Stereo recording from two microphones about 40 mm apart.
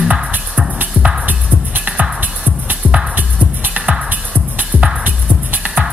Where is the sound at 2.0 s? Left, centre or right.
Right.